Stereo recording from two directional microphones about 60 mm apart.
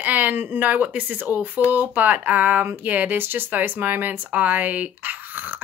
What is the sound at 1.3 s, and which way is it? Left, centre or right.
Speech, right.